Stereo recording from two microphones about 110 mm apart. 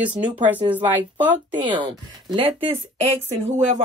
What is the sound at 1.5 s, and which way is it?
Speech, 50° right (ahead or behind).